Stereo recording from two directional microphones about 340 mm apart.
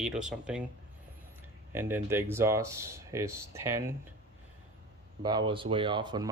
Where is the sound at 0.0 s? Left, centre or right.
Centre.